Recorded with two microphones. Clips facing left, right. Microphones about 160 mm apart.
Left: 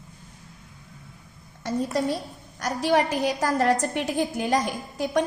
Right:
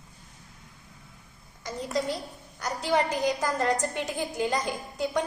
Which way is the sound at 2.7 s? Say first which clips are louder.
Left 4 dB; 65° left (ahead or behind).